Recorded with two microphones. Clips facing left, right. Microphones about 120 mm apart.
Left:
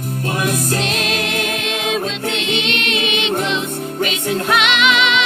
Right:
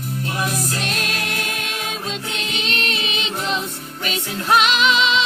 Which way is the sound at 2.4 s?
40° right (ahead or behind).